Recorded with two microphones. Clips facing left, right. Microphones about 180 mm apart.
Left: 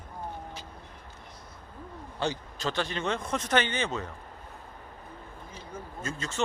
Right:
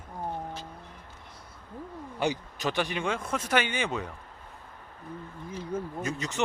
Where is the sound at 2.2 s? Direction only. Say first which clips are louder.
Right 2 dB; 15° right (ahead or behind).